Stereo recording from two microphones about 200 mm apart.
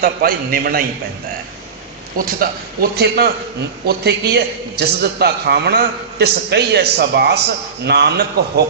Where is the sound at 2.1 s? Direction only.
45° right (ahead or behind).